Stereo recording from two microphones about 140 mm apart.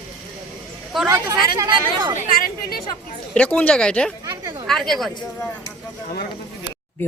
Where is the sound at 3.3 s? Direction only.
10° left (ahead or behind).